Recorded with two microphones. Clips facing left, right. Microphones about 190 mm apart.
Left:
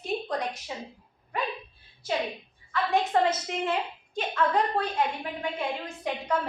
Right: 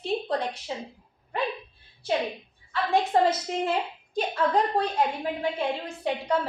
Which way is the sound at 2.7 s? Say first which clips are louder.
Right 1 dB; 35° right (ahead or behind).